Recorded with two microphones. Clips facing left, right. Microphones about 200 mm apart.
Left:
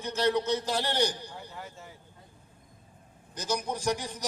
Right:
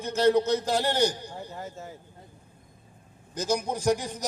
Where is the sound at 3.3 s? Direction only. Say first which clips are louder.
Right 4 dB; 50° right (ahead or behind).